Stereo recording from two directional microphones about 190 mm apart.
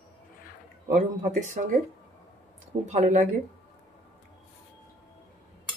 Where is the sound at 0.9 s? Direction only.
40° right (ahead or behind).